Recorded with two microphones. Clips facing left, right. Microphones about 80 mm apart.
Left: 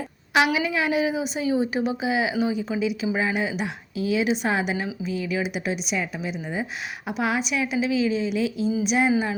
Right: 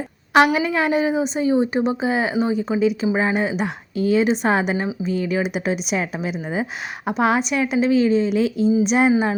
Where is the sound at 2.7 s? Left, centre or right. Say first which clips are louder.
Right 6 dB; right.